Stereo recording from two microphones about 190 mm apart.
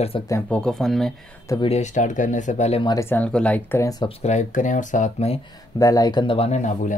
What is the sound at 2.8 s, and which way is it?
Speech, 15° left (ahead or behind).